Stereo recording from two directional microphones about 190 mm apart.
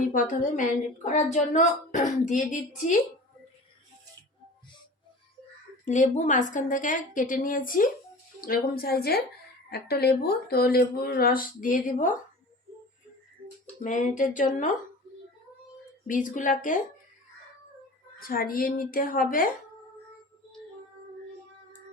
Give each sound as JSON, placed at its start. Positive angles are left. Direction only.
{"t": 0.1, "sound": "a woman's voice", "side_deg": 45}
{"t": 5.8, "sound": "a woman's voice", "side_deg": 40}
{"t": 13.8, "sound": "a woman's voice", "side_deg": 40}
{"t": 16.0, "sound": "a woman's voice", "side_deg": 45}
{"t": 18.2, "sound": "a woman's voice", "side_deg": 50}